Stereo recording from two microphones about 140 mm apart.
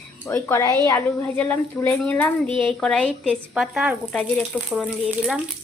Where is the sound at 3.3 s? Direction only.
5° right (ahead or behind).